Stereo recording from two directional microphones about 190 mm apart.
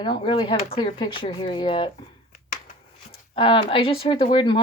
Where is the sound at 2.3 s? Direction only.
45° left (ahead or behind).